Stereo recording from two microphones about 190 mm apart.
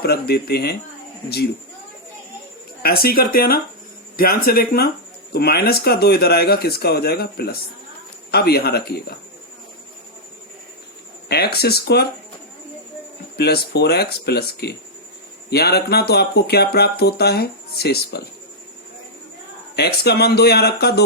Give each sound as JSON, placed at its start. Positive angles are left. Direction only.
{"t": 0.0, "sound": "speech", "side_deg": 55}
{"t": 2.8, "sound": "speech", "side_deg": 55}
{"t": 11.3, "sound": "speech", "side_deg": 55}
{"t": 13.3, "sound": "speech", "side_deg": 60}
{"t": 19.7, "sound": "speech", "side_deg": 60}